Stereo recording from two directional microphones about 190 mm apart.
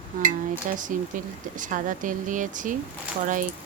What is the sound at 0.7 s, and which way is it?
Speech, 40° right (ahead or behind).